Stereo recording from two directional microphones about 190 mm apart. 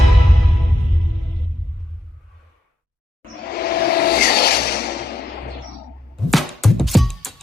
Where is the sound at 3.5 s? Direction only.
55° left (ahead or behind).